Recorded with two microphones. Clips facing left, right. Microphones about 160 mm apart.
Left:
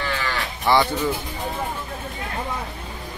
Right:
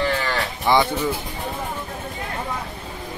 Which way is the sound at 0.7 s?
15° right (ahead or behind).